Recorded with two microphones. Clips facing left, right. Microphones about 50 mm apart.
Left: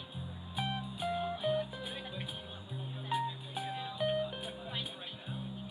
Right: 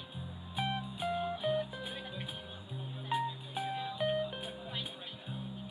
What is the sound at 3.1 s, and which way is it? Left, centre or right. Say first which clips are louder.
Music: right 1 dB; right.